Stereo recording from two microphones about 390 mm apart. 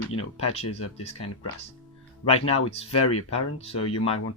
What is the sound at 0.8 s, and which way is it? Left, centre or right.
Speech, left.